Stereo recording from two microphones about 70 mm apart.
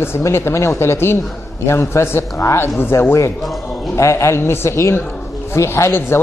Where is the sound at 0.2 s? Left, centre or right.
Left.